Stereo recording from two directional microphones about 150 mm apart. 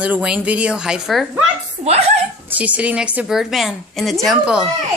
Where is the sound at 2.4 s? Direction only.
10° right (ahead or behind).